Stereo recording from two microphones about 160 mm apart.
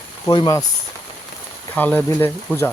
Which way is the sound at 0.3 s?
20° left (ahead or behind).